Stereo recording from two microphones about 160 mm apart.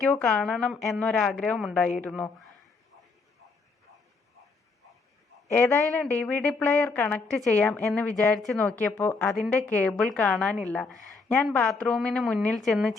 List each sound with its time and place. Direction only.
0.1 s a woman's voice: 10° left (ahead or behind)
5.5 s a woman's voice: 10° left (ahead or behind)
8.7 s a woman's voice: 10° left (ahead or behind)